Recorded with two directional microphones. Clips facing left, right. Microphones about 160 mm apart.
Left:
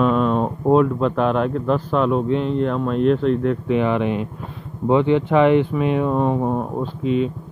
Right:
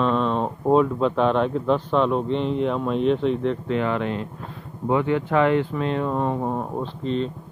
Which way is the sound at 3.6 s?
15° left (ahead or behind).